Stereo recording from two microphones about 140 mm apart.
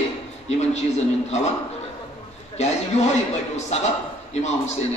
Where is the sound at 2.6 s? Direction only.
50° left (ahead or behind).